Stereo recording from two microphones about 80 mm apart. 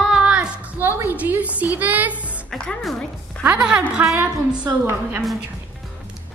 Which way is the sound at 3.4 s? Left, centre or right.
Centre.